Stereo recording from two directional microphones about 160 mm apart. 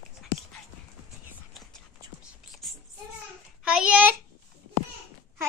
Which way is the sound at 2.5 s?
Centre (ahead or behind).